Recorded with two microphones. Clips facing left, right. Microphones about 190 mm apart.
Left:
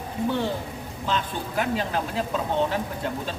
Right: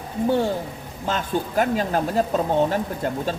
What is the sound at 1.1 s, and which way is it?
A woman's voice, 45° right (ahead or behind).